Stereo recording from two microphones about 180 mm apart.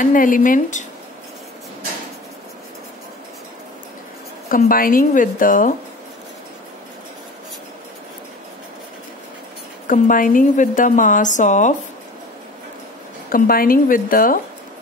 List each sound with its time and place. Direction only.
0.0 s a woman's voice: 50° left (ahead or behind)
4.5 s a woman's voice: 50° left (ahead or behind)
9.8 s a woman's voice: 50° left (ahead or behind)
13.3 s a woman's voice: 55° left (ahead or behind)